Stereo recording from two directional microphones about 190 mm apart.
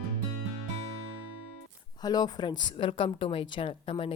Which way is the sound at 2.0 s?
20° left (ahead or behind).